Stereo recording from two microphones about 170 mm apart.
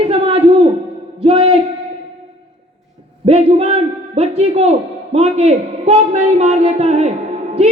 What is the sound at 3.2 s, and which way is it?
A man's voice, 35° right (ahead or behind).